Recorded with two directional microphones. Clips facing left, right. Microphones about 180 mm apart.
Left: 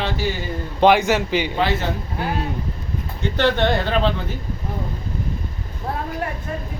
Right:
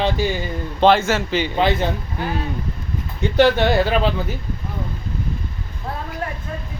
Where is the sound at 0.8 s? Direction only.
15° left (ahead or behind).